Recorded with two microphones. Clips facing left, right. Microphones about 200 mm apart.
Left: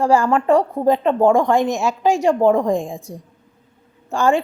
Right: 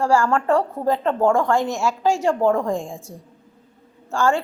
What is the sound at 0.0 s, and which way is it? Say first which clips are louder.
Speech: left 3 dB; 20° left (ahead or behind).